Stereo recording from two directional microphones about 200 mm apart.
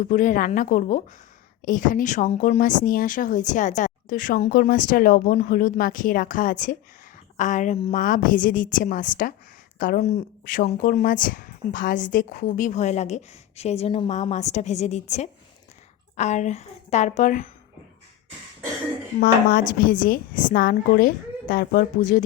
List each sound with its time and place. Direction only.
0.0 s speech: 40° left (ahead or behind)
19.2 s a woman's voice: 45° left (ahead or behind)